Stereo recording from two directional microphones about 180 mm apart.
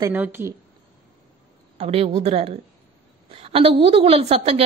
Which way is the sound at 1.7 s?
35° right (ahead or behind).